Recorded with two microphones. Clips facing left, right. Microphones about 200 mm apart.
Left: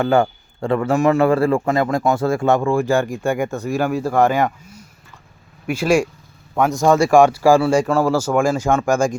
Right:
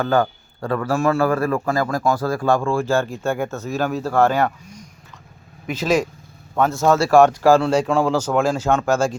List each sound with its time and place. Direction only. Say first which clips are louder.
0.0 s a man's voice: left 3 dB; 25° left (ahead or behind)
5.6 s speech: left 3 dB; 10° left (ahead or behind)